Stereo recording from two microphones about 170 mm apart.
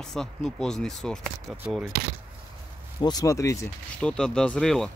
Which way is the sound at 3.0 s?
20° left (ahead or behind).